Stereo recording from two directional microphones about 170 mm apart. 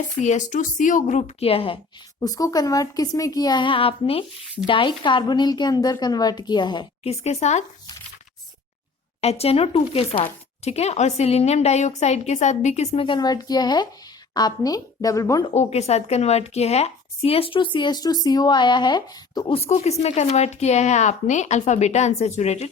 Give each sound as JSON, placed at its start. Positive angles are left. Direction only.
{"t": 0.2, "sound": "a woman's voice", "side_deg": 45}
{"t": 2.2, "sound": "a woman's voice", "side_deg": 20}
{"t": 7.1, "sound": "a woman's voice", "side_deg": 40}
{"t": 9.2, "sound": "a woman's voice", "side_deg": 35}
{"t": 15.5, "sound": "a woman's voice", "side_deg": 40}